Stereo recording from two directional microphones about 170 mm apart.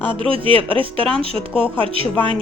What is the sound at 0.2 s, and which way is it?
Speech, 30° right (ahead or behind).